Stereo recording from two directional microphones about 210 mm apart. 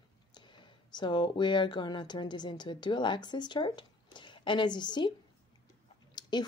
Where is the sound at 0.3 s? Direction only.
20° left (ahead or behind).